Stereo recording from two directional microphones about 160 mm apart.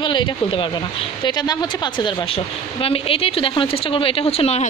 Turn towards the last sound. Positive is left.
turn(degrees=40)  # may be behind; listen again after turning